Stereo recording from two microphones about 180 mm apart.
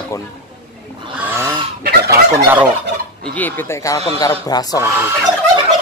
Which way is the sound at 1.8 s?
60° right (ahead or behind).